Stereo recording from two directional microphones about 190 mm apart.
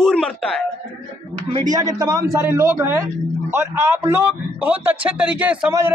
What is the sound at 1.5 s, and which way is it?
A man's voice, 20° right (ahead or behind).